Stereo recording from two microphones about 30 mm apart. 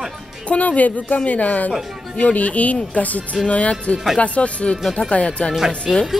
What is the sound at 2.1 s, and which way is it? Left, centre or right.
Speech, left.